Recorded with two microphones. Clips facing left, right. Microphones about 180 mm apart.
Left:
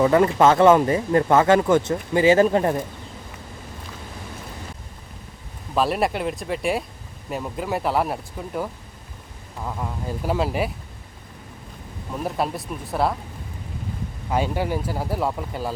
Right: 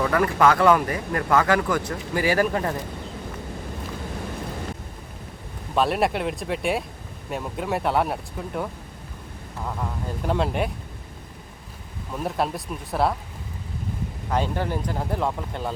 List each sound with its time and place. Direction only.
0.0 s speech: 20° left (ahead or behind)
5.7 s speech: centre (ahead or behind)
12.2 s speech: centre (ahead or behind)
14.3 s speech: 10° left (ahead or behind)